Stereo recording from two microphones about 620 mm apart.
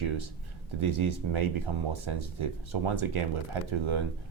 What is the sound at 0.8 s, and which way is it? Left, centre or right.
Speech, right.